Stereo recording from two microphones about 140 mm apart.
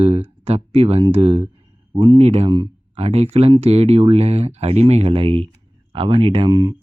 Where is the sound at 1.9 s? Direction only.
35° right (ahead or behind).